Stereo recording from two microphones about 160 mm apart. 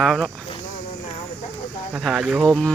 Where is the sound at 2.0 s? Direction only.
5° right (ahead or behind).